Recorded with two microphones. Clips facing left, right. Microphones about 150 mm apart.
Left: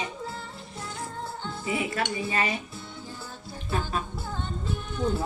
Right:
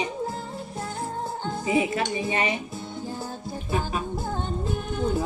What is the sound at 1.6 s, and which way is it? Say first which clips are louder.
Music: right 5 dB; 20° right (ahead or behind).